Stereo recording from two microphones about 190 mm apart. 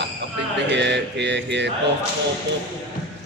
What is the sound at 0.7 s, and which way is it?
A man's voice, 65° right (ahead or behind).